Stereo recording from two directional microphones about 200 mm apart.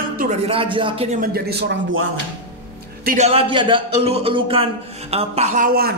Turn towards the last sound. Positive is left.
turn(degrees=-45)  # may be behind; listen again after turning